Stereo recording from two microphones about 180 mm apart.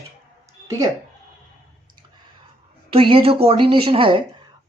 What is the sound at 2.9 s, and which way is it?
A woman's voice, 30° right (ahead or behind).